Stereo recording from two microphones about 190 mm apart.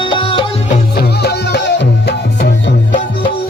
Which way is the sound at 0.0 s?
25° left (ahead or behind).